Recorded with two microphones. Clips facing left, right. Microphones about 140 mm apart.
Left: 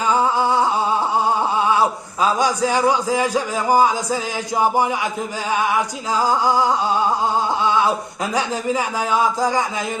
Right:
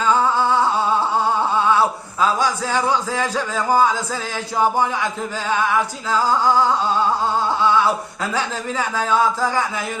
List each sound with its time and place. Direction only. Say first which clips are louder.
0.0 s humming: even; 15° left (ahead or behind)
1.5 s speech: even; 15° left (ahead or behind)